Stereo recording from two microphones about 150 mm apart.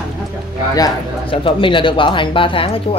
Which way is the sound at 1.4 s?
35° left (ahead or behind).